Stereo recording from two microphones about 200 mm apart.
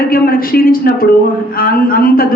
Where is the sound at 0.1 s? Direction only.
45° left (ahead or behind).